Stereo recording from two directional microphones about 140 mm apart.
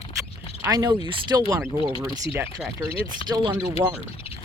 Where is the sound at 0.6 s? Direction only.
25° right (ahead or behind).